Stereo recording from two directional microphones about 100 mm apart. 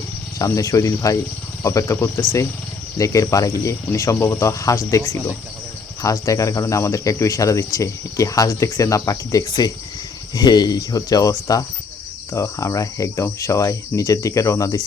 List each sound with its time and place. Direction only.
0.3 s speech: 35° left (ahead or behind)